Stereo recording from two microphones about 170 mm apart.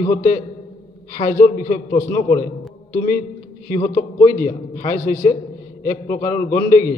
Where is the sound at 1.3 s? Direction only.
15° left (ahead or behind).